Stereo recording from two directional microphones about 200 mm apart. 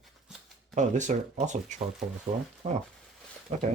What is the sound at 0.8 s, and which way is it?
Speech, 35° right (ahead or behind).